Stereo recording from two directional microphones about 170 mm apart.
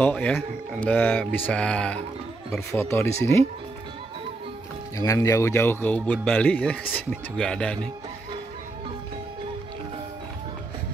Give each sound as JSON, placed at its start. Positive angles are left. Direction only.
{"t": 0.0, "sound": "speech", "side_deg": 10}
{"t": 4.9, "sound": "speech", "side_deg": 20}